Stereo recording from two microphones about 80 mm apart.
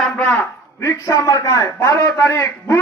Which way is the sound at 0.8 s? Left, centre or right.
Left.